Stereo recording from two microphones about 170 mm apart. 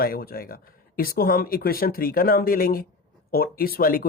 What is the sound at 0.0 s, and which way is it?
A woman's voice, 60° left (ahead or behind).